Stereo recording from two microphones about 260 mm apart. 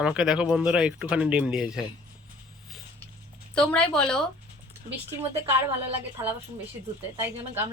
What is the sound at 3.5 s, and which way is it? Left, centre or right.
Speech, centre.